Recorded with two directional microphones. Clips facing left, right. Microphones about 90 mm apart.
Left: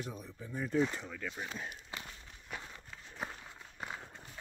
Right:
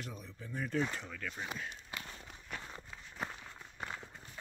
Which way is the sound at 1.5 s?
20° left (ahead or behind).